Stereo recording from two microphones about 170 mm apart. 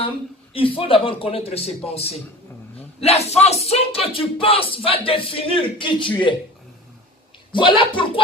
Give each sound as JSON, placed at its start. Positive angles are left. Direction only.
{"t": 0.5, "sound": "speech", "side_deg": 30}
{"t": 7.5, "sound": "speech", "side_deg": 30}